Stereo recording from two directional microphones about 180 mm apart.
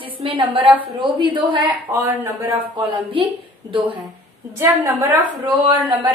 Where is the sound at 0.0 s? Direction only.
30° right (ahead or behind).